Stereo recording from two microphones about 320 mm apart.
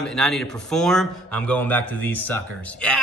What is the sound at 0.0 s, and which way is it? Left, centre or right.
A man's voice, centre.